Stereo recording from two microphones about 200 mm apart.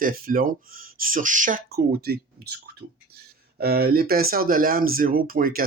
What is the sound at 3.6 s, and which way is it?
Speech, 50° right (ahead or behind).